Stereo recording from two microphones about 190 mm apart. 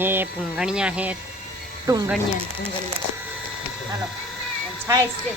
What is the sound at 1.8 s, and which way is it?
Speech, 20° right (ahead or behind).